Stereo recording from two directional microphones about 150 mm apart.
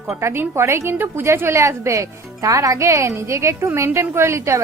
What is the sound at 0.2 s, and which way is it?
A woman's voice, 20° right (ahead or behind).